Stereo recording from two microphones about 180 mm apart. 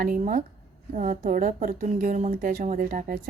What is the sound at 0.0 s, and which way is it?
Speech, 50° right (ahead or behind).